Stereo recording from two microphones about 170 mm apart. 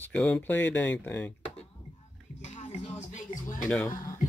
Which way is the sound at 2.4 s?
45° left (ahead or behind).